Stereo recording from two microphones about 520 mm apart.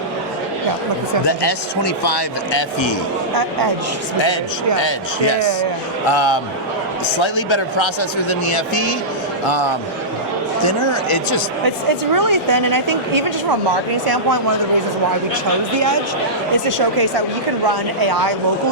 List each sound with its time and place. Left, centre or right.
1.3 s speech: left
6.1 s speech: left
8.3 s speech: left
11.6 s a woman's voice: right
16.6 s a woman's voice: right